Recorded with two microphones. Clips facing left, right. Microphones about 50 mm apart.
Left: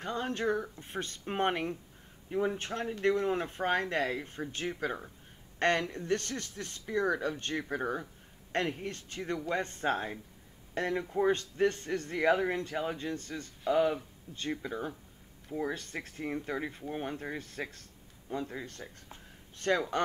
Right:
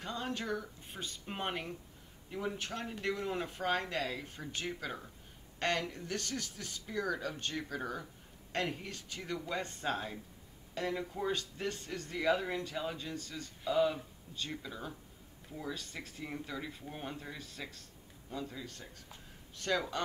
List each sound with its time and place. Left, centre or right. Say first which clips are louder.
0.0 s speech: left 6 dB; left
2.3 s speech: left 7 dB; left